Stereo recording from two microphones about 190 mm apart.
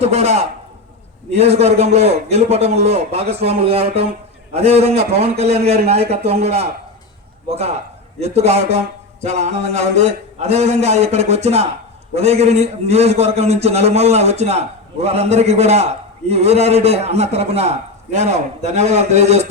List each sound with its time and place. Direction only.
0.0 s a man's voice: 35° right (ahead or behind)
8.2 s a man's voice: 35° right (ahead or behind)